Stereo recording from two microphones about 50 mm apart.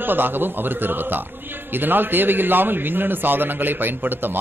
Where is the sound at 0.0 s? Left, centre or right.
Right.